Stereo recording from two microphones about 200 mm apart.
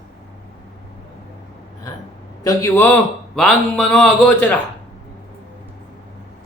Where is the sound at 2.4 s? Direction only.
10° left (ahead or behind).